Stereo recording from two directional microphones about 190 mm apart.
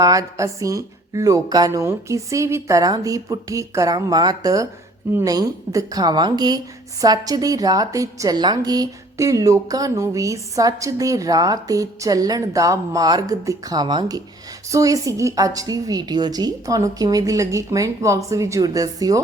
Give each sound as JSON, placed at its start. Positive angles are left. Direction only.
{"t": 0.0, "sound": "a woman's voice", "side_deg": -20}